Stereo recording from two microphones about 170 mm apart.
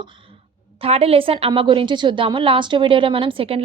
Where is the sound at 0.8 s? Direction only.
35° right (ahead or behind).